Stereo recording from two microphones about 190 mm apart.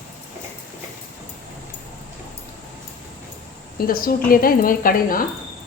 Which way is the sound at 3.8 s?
50° left (ahead or behind).